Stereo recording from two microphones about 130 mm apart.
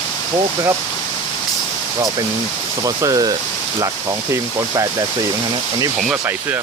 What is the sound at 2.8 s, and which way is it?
Speech, 25° right (ahead or behind).